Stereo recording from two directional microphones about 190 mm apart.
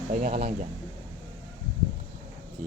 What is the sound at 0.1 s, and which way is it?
Speech, 45° right (ahead or behind).